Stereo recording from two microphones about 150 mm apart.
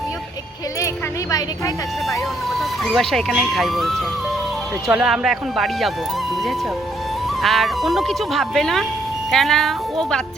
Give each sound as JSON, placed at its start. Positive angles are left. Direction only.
{"t": 2.0, "sound": "speech", "side_deg": 0}
{"t": 7.4, "sound": "speech", "side_deg": 0}